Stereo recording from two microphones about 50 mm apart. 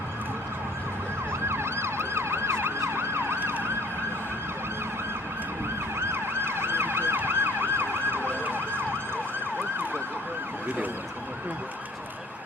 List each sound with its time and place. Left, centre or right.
1.5 s emergency vehicle: right
6.0 s emergency vehicle: right